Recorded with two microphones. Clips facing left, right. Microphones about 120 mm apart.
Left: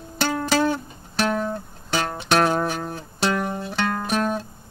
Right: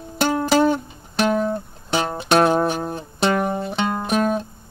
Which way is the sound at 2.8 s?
20° right (ahead or behind).